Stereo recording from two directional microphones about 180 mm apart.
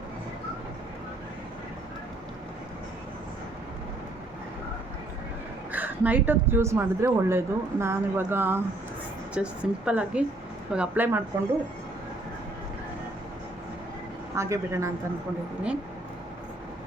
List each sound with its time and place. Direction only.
5.7 s a woman's voice: 10° right (ahead or behind)
14.3 s a woman's voice: 15° right (ahead or behind)